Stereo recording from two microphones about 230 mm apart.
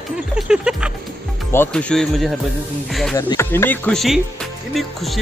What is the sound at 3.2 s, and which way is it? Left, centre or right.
Speech, centre.